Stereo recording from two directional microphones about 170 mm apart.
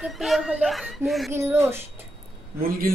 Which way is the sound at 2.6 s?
60° right (ahead or behind).